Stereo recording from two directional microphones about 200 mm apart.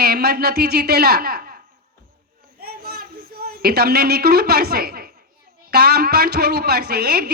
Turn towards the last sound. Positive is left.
turn(degrees=-50)  # may be behind; listen again after turning